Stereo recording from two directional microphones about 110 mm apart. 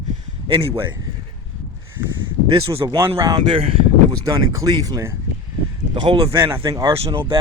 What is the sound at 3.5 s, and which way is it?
Speech, 60° right (ahead or behind).